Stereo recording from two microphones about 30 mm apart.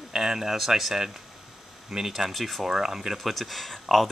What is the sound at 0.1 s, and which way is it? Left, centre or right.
Speech, centre.